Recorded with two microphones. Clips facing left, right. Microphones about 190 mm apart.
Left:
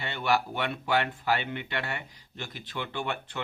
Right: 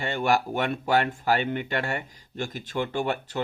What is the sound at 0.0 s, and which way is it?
Speech, 45° right (ahead or behind).